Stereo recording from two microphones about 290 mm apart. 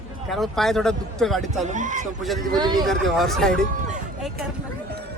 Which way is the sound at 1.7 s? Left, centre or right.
Right.